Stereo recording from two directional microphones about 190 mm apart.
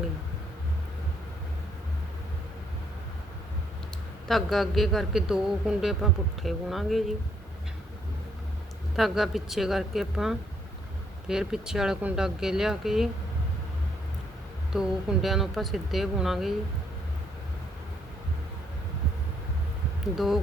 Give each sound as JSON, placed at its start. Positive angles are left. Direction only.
{"t": 4.3, "sound": "a man's voice", "side_deg": 0}
{"t": 9.0, "sound": "a man's voice", "side_deg": 0}
{"t": 14.7, "sound": "a man's voice", "side_deg": 0}
{"t": 20.1, "sound": "a man's voice", "side_deg": 0}